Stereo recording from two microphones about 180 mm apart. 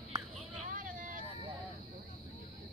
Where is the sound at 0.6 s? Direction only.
45° right (ahead or behind).